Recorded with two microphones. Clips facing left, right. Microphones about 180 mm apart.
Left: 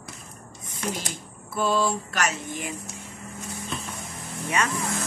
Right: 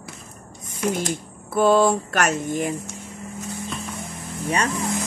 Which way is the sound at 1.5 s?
55° right (ahead or behind).